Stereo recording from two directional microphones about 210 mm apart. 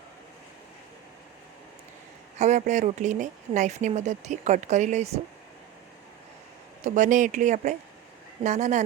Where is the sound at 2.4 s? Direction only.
35° right (ahead or behind).